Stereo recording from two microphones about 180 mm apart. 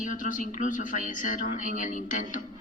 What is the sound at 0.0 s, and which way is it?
Speech, 45° left (ahead or behind).